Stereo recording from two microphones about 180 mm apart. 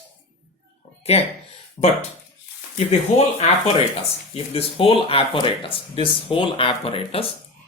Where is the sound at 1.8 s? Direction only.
20° left (ahead or behind).